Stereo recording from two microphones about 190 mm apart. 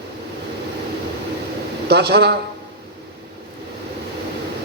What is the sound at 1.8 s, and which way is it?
Speech, 60° right (ahead or behind).